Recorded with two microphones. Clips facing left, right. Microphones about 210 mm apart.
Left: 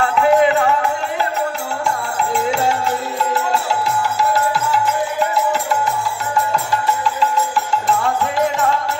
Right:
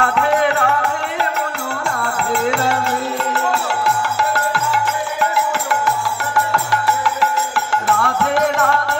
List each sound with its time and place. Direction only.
0.0 s music: 65° right (ahead or behind)
2.1 s music: 70° right (ahead or behind)